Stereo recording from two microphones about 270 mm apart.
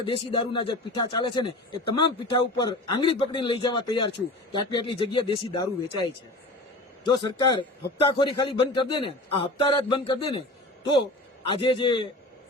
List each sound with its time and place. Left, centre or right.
0.0 s a man's voice: centre
7.2 s a man's voice: centre
11.4 s a man's voice: centre